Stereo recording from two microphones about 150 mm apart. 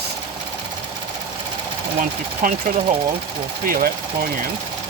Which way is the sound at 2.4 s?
70° right (ahead or behind).